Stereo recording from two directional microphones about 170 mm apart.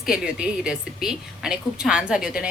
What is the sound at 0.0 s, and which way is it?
Speech, 5° right (ahead or behind).